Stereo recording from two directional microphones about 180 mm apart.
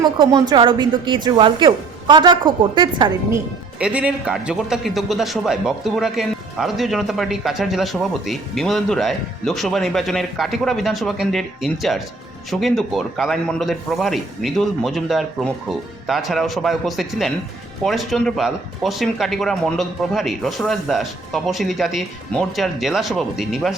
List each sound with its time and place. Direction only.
0.2 s a woman's voice: 20° right (ahead or behind)
3.3 s speech: 5° right (ahead or behind)